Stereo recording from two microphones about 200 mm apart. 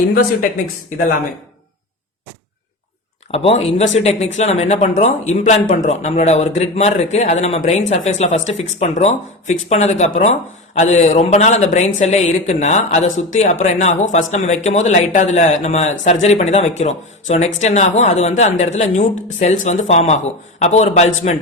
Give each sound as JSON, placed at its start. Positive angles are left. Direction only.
{"t": 3.3, "sound": "speech", "side_deg": 30}